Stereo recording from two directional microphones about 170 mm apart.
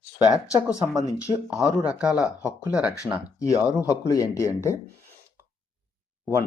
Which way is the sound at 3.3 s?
20° left (ahead or behind).